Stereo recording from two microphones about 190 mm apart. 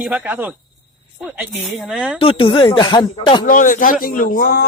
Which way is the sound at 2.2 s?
30° left (ahead or behind).